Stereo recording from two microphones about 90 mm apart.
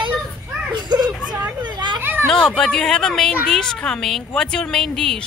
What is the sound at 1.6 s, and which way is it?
Children playing, 55° right (ahead or behind).